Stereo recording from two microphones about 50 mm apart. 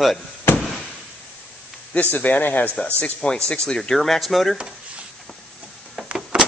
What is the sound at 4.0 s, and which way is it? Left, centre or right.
Speech, centre.